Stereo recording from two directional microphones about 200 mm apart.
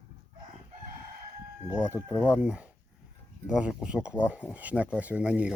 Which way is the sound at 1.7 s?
5° right (ahead or behind).